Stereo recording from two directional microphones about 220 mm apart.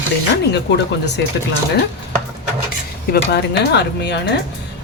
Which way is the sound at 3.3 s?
50° left (ahead or behind).